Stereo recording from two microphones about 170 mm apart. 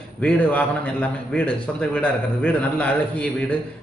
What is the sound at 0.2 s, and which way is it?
A man's voice, 10° left (ahead or behind).